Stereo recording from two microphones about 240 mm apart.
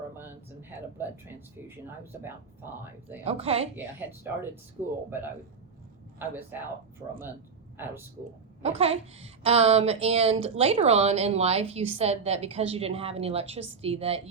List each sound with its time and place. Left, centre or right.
0.9 s speech: centre
3.2 s a woman's voice: right
3.8 s speech: centre
6.1 s speech: centre
7.8 s speech: centre
8.8 s a woman's voice: right